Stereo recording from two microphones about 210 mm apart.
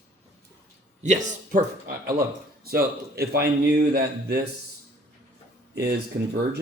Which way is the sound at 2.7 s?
45° right (ahead or behind).